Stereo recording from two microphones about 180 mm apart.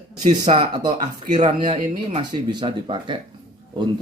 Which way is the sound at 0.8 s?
40° right (ahead or behind).